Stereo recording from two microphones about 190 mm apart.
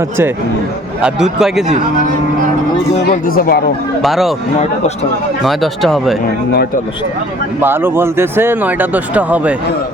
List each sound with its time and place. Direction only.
1.0 s speech: centre (ahead or behind)
3.1 s speech: 50° left (ahead or behind)
4.0 s speech: centre (ahead or behind)
5.4 s speech: centre (ahead or behind)
7.6 s speech: 10° right (ahead or behind)